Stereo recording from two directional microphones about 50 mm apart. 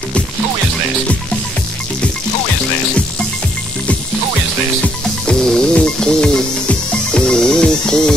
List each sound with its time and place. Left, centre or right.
4.8 s music: centre